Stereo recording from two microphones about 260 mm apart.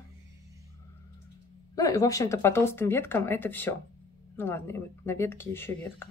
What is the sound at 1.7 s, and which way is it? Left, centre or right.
Speech, centre.